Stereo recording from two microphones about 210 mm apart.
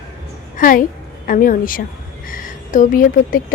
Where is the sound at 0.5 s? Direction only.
40° left (ahead or behind).